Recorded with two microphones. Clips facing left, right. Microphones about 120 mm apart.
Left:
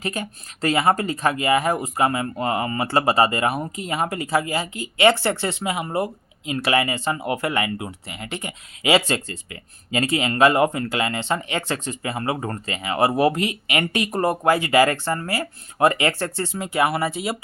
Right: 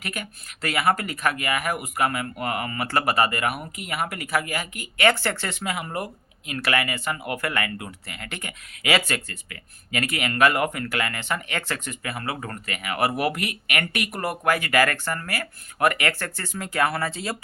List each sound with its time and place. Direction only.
0.0 s speech: 30° left (ahead or behind)